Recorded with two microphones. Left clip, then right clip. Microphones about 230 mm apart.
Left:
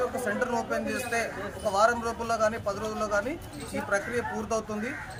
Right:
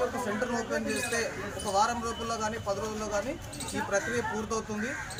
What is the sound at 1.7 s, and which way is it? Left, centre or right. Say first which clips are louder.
Speech: left 3 dB; left.